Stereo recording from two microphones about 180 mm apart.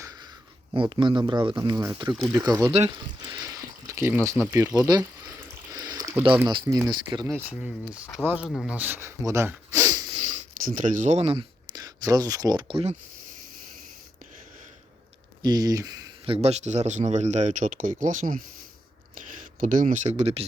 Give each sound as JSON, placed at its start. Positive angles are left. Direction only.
{"t": 0.7, "sound": "speech", "side_deg": -25}
{"t": 2.7, "sound": "speech", "side_deg": -35}
{"t": 3.2, "sound": "a sound", "side_deg": -20}
{"t": 4.4, "sound": "speech", "side_deg": -15}
{"t": 5.7, "sound": "boiling", "side_deg": -20}
{"t": 6.7, "sound": "speech", "side_deg": -20}
{"t": 7.6, "sound": "speech", "side_deg": -5}
{"t": 10.6, "sound": "speech", "side_deg": -45}
{"t": 15.4, "sound": "speech", "side_deg": -20}
{"t": 19.5, "sound": "speech", "side_deg": -45}